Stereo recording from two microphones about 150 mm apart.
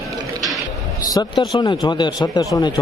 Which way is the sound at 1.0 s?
25° left (ahead or behind).